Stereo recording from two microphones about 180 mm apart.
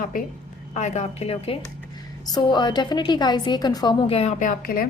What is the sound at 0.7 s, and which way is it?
Speech, 40° left (ahead or behind).